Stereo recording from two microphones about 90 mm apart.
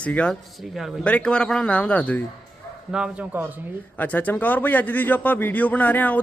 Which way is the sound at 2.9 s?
10° right (ahead or behind).